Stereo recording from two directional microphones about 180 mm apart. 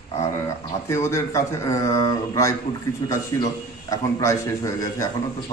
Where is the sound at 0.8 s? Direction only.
15° left (ahead or behind).